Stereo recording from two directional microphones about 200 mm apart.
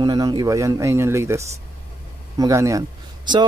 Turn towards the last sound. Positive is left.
turn(degrees=-20)  # may be behind; listen again after turning